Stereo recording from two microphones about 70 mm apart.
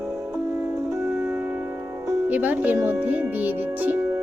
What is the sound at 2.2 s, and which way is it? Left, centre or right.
Music, right.